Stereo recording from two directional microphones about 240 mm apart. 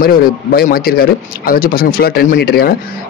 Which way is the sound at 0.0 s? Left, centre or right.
Left.